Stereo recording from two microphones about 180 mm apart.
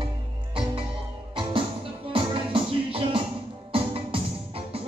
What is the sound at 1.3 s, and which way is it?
Music, 30° right (ahead or behind).